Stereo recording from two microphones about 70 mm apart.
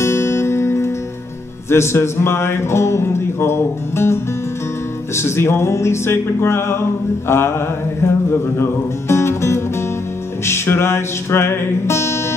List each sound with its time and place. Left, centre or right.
0.0 s music: left